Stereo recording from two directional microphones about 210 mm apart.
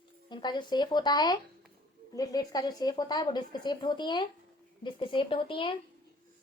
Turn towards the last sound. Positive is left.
turn(degrees=25)  # may be behind; listen again after turning